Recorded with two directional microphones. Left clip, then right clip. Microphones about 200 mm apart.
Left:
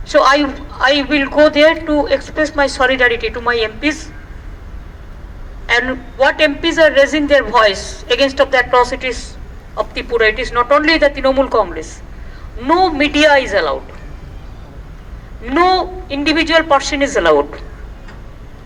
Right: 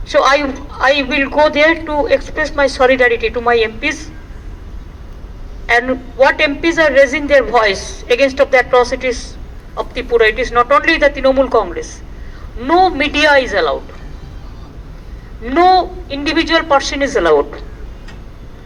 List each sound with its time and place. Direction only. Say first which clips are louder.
0.1 s a woman's voice: left 1 dB; 25° right (ahead or behind)
5.6 s a woman's voice: right 2 dB; 25° right (ahead or behind)
15.4 s a woman's voice: right 3 dB; 30° right (ahead or behind)